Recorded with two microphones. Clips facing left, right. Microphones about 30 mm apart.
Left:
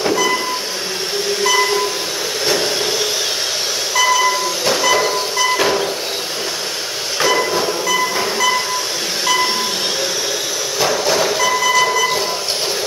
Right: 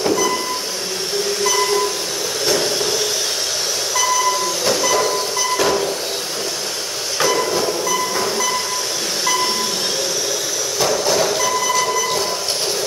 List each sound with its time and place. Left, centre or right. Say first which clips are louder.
0.0 s vehicle: left 2 dB; left
1.4 s train: left 3 dB; centre
3.9 s train: left 4 dB; left
7.2 s train: left 2 dB; centre
10.8 s train: left 1 dB; centre